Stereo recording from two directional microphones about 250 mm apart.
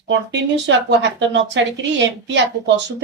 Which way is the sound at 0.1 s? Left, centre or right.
Right.